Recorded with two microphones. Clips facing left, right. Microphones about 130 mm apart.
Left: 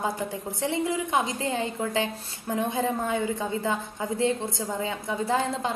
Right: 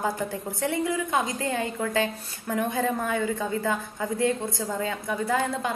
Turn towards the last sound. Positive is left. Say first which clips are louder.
# even
turn(degrees=25)  # may be behind; listen again after turning